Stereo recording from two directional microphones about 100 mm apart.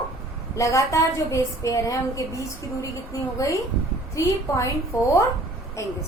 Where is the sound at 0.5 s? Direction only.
30° left (ahead or behind).